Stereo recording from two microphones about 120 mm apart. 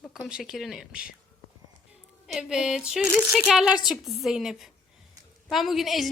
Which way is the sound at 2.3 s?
5° right (ahead or behind).